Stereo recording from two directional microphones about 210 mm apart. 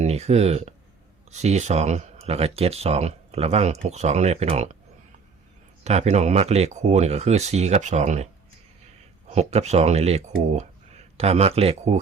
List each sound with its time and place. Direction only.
0.0 s speech: 30° right (ahead or behind)
5.8 s speech: 30° right (ahead or behind)
9.3 s speech: 30° right (ahead or behind)